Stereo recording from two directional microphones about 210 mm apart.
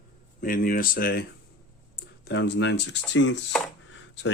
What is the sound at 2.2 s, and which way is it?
Speech, 55° left (ahead or behind).